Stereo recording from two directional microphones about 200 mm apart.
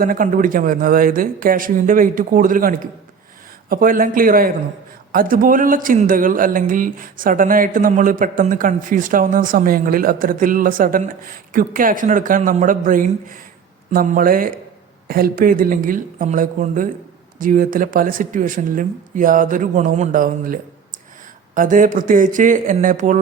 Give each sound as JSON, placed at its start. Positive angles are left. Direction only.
{"t": 0.0, "sound": "speech", "side_deg": -45}